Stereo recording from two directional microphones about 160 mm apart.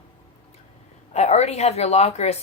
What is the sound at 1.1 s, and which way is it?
A woman's voice, 45° left (ahead or behind).